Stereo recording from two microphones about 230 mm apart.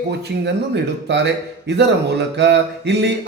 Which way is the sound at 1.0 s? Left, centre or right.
Right.